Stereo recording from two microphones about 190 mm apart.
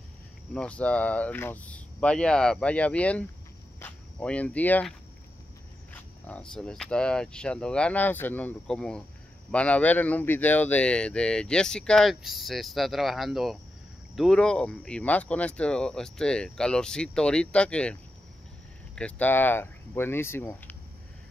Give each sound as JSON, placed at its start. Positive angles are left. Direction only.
{"t": 0.6, "sound": "speech", "side_deg": 5}
{"t": 5.9, "sound": "speech", "side_deg": 5}
{"t": 18.9, "sound": "speech", "side_deg": 5}